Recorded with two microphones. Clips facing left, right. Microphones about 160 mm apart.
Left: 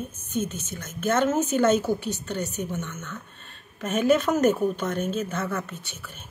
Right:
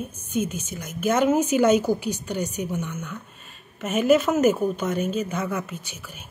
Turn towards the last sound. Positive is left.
turn(degrees=-10)  # may be behind; listen again after turning